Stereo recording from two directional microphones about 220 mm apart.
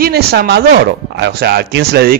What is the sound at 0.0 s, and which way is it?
A man's voice, 45° right (ahead or behind).